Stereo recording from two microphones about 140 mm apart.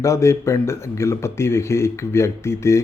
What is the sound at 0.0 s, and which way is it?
Speech, 20° left (ahead or behind).